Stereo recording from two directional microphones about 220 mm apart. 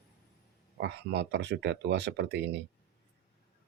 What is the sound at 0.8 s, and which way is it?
Speech, 50° right (ahead or behind).